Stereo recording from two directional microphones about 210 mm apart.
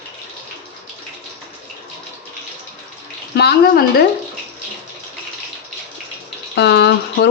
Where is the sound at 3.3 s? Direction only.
50° left (ahead or behind).